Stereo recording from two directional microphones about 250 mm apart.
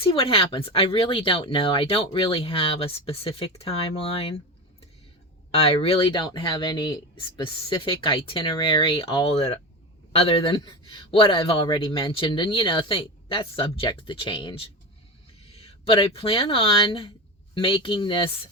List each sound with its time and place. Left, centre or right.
0.0 s a man's voice: left
5.5 s a man's voice: left